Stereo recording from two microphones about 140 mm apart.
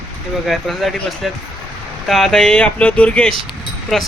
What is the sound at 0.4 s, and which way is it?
Speech, centre (ahead or behind).